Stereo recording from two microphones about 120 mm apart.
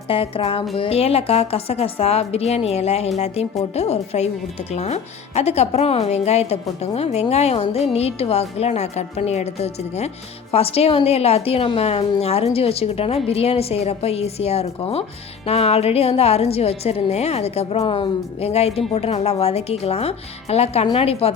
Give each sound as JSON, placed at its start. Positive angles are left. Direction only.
{"t": 0.1, "sound": "a woman's voice", "side_deg": 50}